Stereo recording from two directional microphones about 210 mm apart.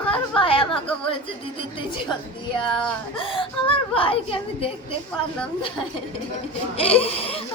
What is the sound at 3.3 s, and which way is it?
A woman's voice, 25° left (ahead or behind).